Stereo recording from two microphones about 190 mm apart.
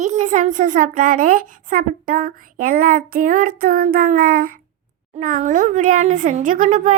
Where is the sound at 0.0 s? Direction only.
40° right (ahead or behind).